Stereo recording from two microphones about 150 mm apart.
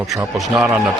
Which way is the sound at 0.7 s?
15° right (ahead or behind).